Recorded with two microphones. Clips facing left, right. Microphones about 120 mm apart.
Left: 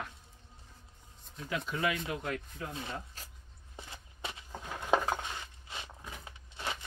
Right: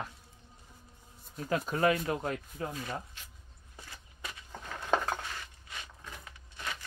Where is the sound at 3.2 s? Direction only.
40° left (ahead or behind).